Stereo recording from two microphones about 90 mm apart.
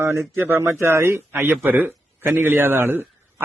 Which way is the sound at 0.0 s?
35° right (ahead or behind).